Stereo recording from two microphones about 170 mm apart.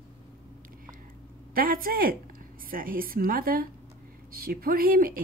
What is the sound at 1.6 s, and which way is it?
Speech, 55° right (ahead or behind).